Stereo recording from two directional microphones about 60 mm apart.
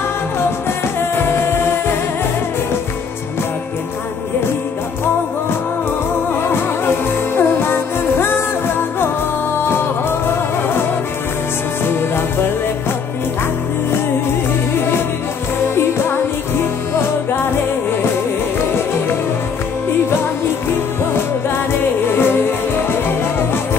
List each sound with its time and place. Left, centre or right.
1.1 s music: left
6.4 s music: left
15.7 s music: left
22.1 s music: left